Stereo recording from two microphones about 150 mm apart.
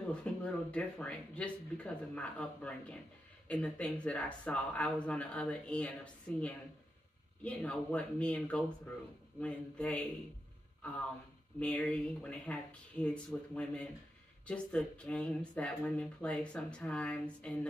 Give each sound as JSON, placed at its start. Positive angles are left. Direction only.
{"t": 0.1, "sound": "a woman's voice", "side_deg": 10}
{"t": 7.4, "sound": "speech", "side_deg": 10}
{"t": 11.6, "sound": "speech", "side_deg": 5}